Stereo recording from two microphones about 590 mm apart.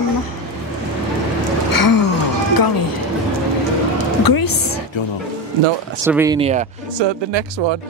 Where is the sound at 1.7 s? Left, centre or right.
Left.